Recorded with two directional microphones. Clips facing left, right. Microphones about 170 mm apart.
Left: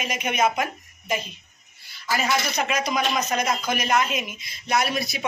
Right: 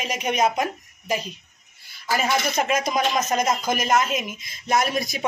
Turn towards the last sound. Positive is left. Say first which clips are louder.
# right 2 dB
turn(degrees=-45)  # may be behind; listen again after turning